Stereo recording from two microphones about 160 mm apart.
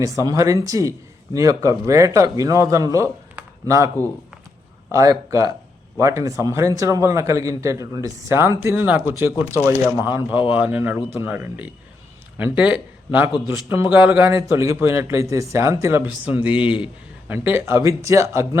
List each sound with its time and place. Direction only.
0.0 s a man's voice: 20° right (ahead or behind)